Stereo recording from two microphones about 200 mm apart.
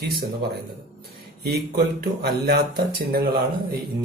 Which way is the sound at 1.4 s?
55° right (ahead or behind).